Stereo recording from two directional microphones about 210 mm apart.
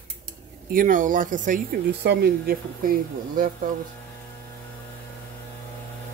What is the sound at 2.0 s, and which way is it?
Speech, 50° right (ahead or behind).